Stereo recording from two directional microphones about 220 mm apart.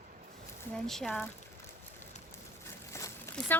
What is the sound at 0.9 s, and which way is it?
Speech, centre (ahead or behind).